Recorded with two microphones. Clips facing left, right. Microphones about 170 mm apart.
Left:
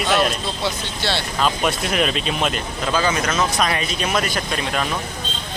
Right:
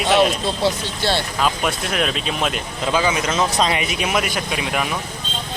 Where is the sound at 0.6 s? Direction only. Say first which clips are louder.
Right 3 dB; 45° right (ahead or behind).